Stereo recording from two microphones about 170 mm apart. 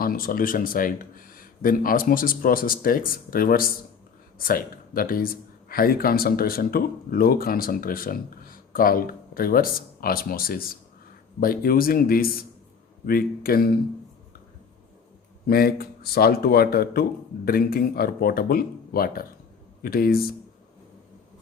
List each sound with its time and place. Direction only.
0.0 s speech: 60° left (ahead or behind)
15.4 s speech: 65° left (ahead or behind)